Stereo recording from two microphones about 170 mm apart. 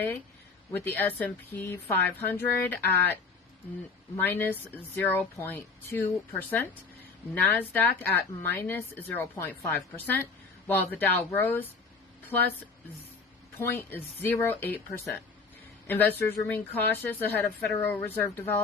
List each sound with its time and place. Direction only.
0.7 s a woman's voice: 10° left (ahead or behind)
4.2 s a woman's voice: 10° left (ahead or behind)
7.4 s a woman's voice: 10° left (ahead or behind)
13.6 s a woman's voice: 10° left (ahead or behind)